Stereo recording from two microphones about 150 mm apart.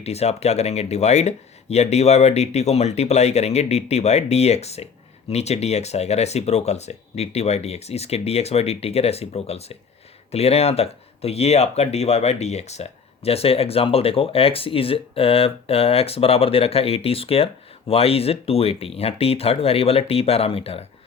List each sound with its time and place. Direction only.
0.0 s speech: 45° left (ahead or behind)